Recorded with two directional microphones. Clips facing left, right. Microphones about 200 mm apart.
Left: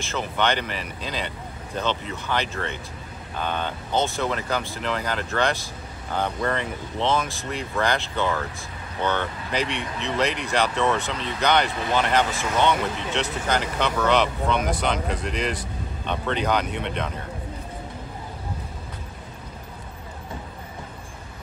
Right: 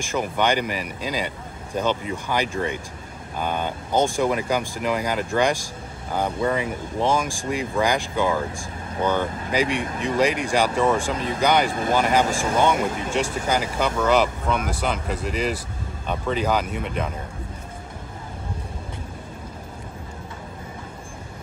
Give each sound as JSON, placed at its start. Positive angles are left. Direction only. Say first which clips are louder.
{"t": 0.0, "sound": "speech", "louder": "right 2 dB", "side_deg": -10}
{"t": 9.8, "sound": "speech", "louder": "right 4 dB", "side_deg": -50}
{"t": 10.1, "sound": "speech", "louder": "right 3 dB", "side_deg": -10}
{"t": 11.1, "sound": "speech", "louder": "right 4 dB", "side_deg": -50}
{"t": 11.4, "sound": "speech", "louder": "right 2 dB", "side_deg": -10}
{"t": 12.7, "sound": "speech", "louder": "right 3 dB", "side_deg": -50}
{"t": 13.1, "sound": "speech", "louder": "right 1 dB", "side_deg": -10}